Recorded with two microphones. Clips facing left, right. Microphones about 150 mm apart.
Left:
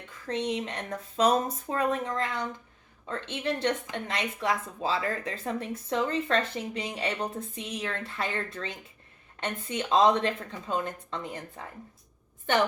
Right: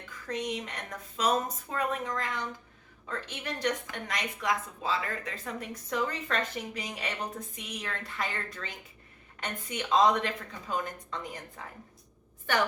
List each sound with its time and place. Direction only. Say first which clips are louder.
0.3 s speech: left 4 dB; 30° left (ahead or behind)